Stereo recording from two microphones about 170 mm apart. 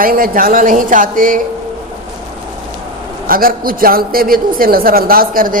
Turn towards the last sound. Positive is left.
turn(degrees=-55)  # may be behind; listen again after turning